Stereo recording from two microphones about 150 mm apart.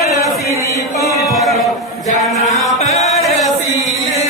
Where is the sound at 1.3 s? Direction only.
Centre (ahead or behind).